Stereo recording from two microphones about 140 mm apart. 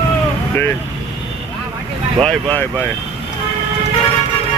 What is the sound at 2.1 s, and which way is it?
Speech, 5° left (ahead or behind).